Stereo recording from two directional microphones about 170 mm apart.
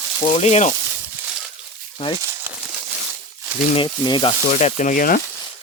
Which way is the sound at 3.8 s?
30° left (ahead or behind).